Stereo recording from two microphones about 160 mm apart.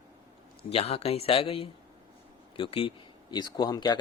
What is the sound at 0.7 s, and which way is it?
Speech, 40° left (ahead or behind).